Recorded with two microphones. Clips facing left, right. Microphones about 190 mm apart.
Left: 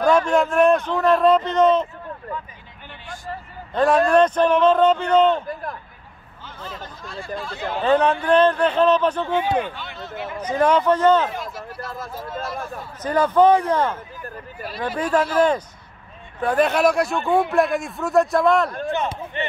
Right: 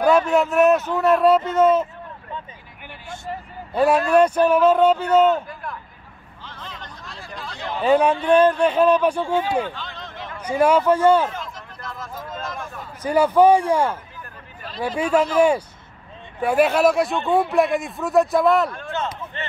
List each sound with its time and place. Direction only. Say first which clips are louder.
0.0 s a man's voice: even; 5° right (ahead or behind)
3.7 s speech: even; 10° right (ahead or behind)
5.5 s a sound: left 4 dB; 40° left (ahead or behind)
6.4 s hubbub: left 3 dB; 5° left (ahead or behind)
7.8 s speech: right 1 dB; 10° right (ahead or behind)
9.8 s a sound: left 3 dB; 5° left (ahead or behind)
10.4 s speech: right 1 dB; 10° right (ahead or behind)
11.5 s a sound: left 4 dB; 10° left (ahead or behind)
13.0 s speech: right 1 dB; 10° right (ahead or behind)
15.0 s speech: right 1 dB; 10° right (ahead or behind)
18.9 s speech: left 3 dB; 15° left (ahead or behind)